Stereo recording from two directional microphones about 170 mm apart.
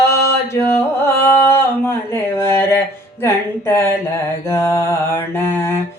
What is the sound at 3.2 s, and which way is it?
Mantra, 15° left (ahead or behind).